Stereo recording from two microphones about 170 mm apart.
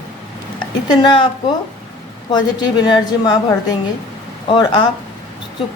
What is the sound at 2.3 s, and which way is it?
Speech, 25° left (ahead or behind).